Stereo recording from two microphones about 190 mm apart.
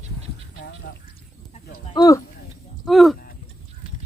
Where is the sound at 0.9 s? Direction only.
50° left (ahead or behind).